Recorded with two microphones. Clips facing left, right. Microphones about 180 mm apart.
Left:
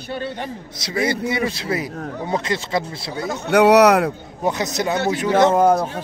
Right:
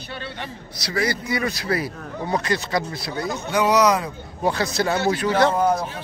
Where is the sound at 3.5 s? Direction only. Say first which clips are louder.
Left 6 dB; 70° left (ahead or behind).